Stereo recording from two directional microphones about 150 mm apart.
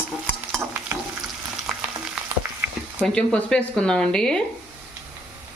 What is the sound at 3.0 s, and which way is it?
Speech, 5° left (ahead or behind).